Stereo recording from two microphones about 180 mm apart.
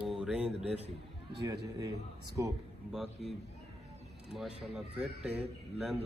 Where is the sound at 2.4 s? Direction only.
15° right (ahead or behind).